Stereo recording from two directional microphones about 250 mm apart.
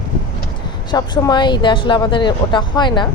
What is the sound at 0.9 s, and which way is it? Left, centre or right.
Speech, centre.